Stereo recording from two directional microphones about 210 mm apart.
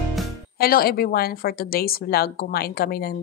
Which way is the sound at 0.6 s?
45° left (ahead or behind).